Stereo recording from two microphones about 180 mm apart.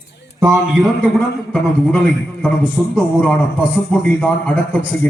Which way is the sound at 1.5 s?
5° left (ahead or behind).